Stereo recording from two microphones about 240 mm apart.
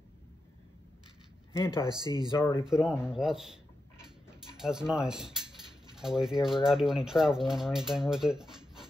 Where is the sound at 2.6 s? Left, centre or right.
Centre.